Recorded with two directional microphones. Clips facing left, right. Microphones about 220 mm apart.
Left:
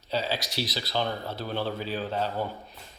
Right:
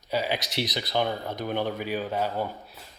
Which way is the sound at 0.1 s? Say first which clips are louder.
Right 2 dB; 15° right (ahead or behind).